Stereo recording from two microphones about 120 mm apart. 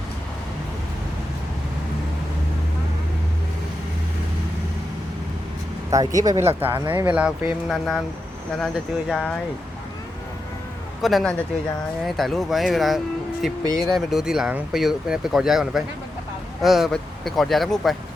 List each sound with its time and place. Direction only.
5.9 s speech: 30° right (ahead or behind); by 9.3 s 5° left (ahead or behind)
11.0 s speech: centre (ahead or behind)